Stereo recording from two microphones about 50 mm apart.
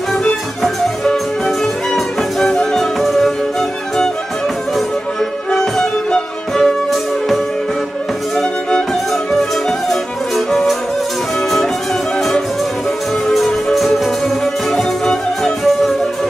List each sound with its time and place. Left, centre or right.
2.4 s music: centre
5.5 s music: centre
9.3 s music: centre
13.7 s music: centre